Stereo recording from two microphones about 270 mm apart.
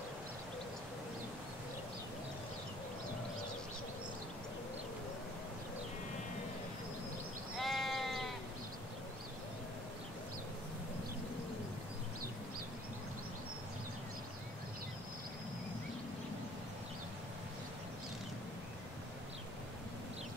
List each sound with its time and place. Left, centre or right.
7.5 s sheep: centre